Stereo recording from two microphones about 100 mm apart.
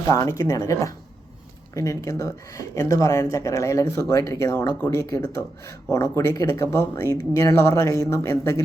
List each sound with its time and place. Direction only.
0.1 s speech: 30° left (ahead or behind)